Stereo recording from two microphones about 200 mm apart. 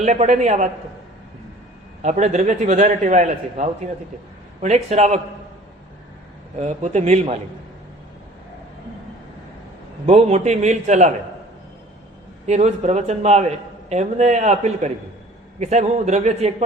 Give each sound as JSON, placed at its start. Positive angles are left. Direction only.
{"t": 0.0, "sound": "a man's voice", "side_deg": -35}
{"t": 2.0, "sound": "a man's voice", "side_deg": -35}
{"t": 6.6, "sound": "a man's voice", "side_deg": -35}
{"t": 10.1, "sound": "a man's voice", "side_deg": -35}
{"t": 12.5, "sound": "a man's voice", "side_deg": -35}